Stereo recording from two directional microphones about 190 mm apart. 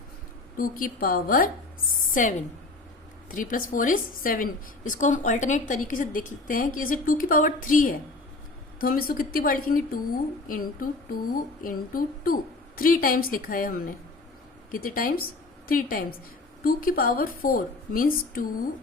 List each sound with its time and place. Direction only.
0.5 s a woman's voice: 50° left (ahead or behind)
3.3 s a woman's voice: 45° left (ahead or behind)